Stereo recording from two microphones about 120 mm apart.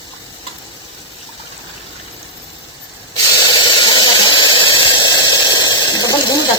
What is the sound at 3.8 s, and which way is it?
Squeal, 35° left (ahead or behind).